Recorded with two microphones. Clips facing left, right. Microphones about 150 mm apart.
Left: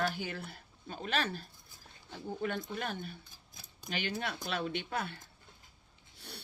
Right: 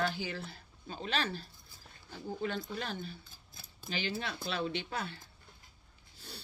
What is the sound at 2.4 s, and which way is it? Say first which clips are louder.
Speech: left 1 dB; 55° left (ahead or behind).